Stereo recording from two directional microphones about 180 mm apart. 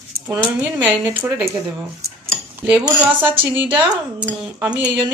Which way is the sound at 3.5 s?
10° right (ahead or behind).